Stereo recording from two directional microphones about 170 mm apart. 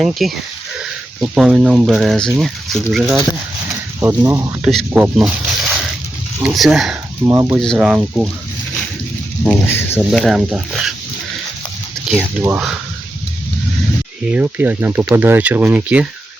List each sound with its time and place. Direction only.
0.0 s speech: centre (ahead or behind)
4.0 s speech: 15° right (ahead or behind)
4.6 s speech: centre (ahead or behind)
6.4 s speech: centre (ahead or behind)
7.2 s speech: 30° right (ahead or behind)
7.6 s speech: centre (ahead or behind)
9.4 s speech: 10° left (ahead or behind)
10.1 s speech: centre (ahead or behind)
12.0 s speech: 5° left (ahead or behind)
14.3 s speech: 10° right (ahead or behind)